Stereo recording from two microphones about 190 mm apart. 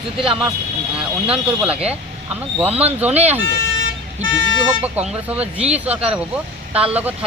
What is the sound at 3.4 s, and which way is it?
Car alarm, 90° right.